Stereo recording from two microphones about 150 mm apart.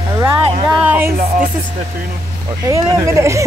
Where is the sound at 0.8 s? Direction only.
15° right (ahead or behind).